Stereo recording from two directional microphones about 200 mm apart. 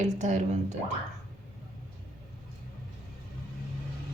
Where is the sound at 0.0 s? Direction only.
35° right (ahead or behind).